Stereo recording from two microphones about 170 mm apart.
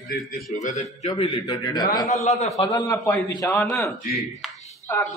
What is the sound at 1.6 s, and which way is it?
A man's voice, 20° left (ahead or behind).